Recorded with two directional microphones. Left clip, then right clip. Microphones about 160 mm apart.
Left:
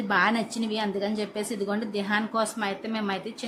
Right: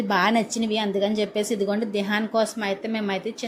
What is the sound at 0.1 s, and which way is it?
A woman's voice, 20° right (ahead or behind).